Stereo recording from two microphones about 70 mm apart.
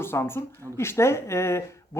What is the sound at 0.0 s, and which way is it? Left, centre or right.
Speech, left.